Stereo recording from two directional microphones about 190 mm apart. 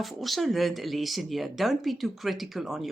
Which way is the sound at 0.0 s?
Centre (ahead or behind).